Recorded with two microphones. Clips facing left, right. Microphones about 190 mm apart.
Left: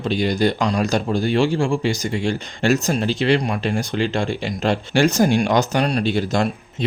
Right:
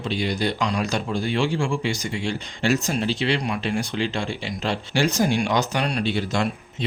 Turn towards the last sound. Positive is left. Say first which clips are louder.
# left 4 dB
turn(degrees=40)  # may be behind; listen again after turning